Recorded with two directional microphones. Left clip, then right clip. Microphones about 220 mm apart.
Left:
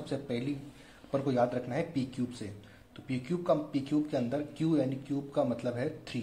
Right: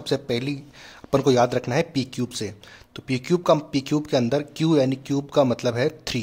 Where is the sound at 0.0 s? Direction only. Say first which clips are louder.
Right 11 dB; 35° right (ahead or behind).